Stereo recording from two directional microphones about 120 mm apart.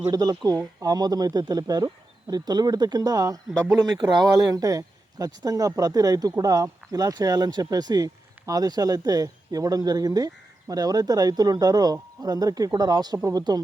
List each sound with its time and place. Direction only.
0.1 s speech: 35° right (ahead or behind)